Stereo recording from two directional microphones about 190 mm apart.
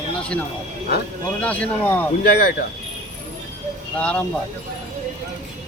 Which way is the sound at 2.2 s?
55° left (ahead or behind).